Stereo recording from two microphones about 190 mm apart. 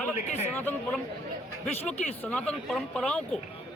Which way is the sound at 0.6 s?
10° left (ahead or behind).